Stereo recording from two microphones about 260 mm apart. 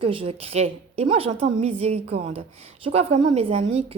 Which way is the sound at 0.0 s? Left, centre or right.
Right.